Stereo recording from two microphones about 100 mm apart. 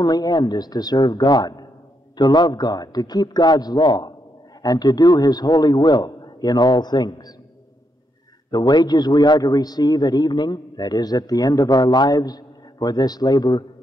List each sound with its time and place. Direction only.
0.0 s a man's voice: 45° left (ahead or behind)
8.5 s a man's voice: 45° left (ahead or behind)